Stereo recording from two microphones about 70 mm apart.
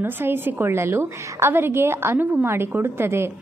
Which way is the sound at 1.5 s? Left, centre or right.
Right.